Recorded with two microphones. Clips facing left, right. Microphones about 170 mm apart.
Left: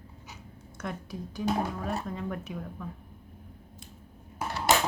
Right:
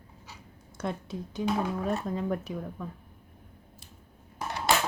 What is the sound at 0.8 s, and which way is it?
Speech, 25° right (ahead or behind).